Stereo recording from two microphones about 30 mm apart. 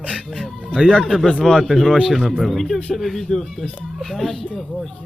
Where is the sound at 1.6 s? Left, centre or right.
Centre.